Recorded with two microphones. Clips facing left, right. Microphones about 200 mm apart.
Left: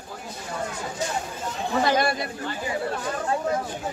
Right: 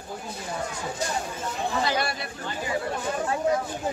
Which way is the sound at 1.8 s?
50° left (ahead or behind).